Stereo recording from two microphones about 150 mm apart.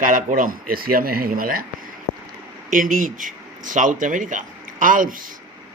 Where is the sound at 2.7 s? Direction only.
65° right (ahead or behind).